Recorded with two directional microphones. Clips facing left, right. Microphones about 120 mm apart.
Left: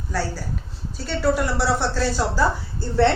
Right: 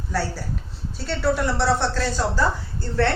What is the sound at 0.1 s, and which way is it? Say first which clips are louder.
A woman's voice: even; centre (ahead or behind).